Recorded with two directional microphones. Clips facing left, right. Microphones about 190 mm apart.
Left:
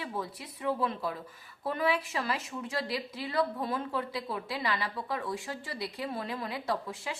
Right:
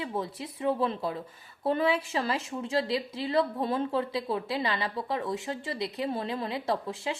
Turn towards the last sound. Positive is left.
turn(degrees=-25)  # may be behind; listen again after turning